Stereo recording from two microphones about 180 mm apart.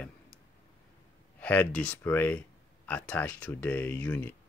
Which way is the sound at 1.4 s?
5° left (ahead or behind).